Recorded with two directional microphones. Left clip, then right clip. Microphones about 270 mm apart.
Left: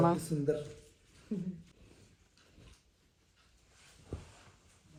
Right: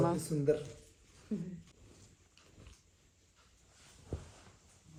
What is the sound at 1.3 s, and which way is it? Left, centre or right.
Speech, centre.